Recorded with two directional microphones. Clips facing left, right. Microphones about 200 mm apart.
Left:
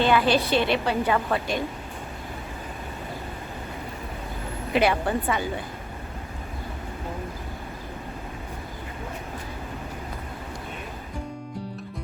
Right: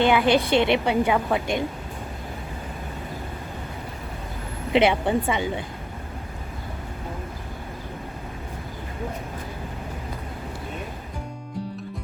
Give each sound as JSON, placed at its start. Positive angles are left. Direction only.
{"t": 0.0, "sound": "a woman's voice", "side_deg": -15}
{"t": 4.7, "sound": "a woman's voice", "side_deg": -20}